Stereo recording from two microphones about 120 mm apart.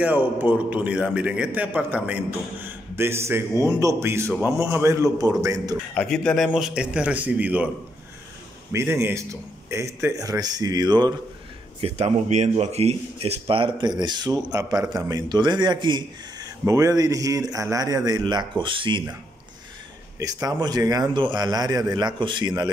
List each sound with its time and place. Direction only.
0.0 s a man's voice: 15° right (ahead or behind); by 5.8 s 30° right (ahead or behind)
5.9 s a man's voice: 5° left (ahead or behind); by 7.7 s 10° right (ahead or behind)
8.9 s a man's voice: 25° right (ahead or behind)
11.8 s speech: 60° right (ahead or behind); by 16.4 s 40° right (ahead or behind)
16.6 s speech: 30° right (ahead or behind); by 19.0 s 45° right (ahead or behind)
20.2 s speech: 30° right (ahead or behind)